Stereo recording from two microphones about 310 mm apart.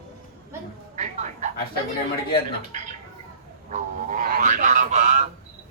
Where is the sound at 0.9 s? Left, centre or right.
Right.